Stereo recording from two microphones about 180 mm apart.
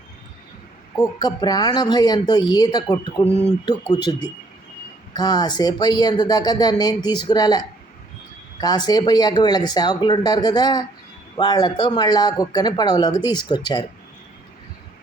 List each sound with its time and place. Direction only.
0.9 s speech: 20° left (ahead or behind)
5.1 s speech: 20° left (ahead or behind)
8.6 s speech: 20° left (ahead or behind)